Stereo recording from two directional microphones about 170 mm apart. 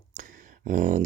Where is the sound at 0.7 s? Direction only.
50° right (ahead or behind).